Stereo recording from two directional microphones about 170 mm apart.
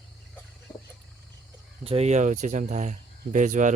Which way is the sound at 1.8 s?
35° right (ahead or behind).